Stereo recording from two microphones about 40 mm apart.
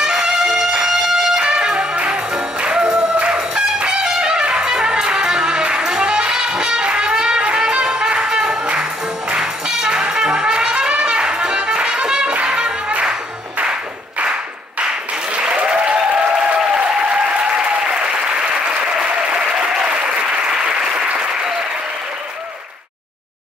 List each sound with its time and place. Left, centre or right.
0.0 s music: centre
15.3 s applause: right